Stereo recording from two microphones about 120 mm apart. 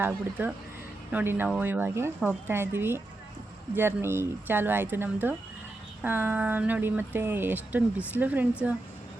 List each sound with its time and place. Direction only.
0.0 s speech: 15° right (ahead or behind)